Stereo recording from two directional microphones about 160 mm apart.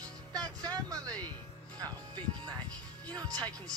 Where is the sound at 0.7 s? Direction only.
20° right (ahead or behind).